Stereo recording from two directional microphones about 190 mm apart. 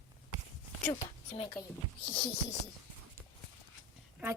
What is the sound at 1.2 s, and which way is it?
Speech, 30° left (ahead or behind).